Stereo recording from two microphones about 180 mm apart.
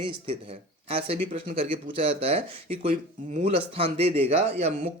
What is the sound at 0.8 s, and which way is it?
A man's voice, 35° right (ahead or behind).